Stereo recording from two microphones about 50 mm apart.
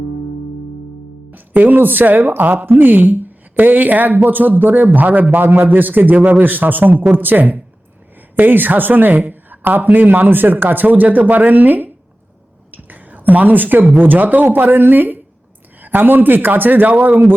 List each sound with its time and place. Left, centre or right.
1.3 s speech: right